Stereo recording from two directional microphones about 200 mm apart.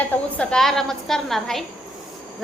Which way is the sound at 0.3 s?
5° left (ahead or behind).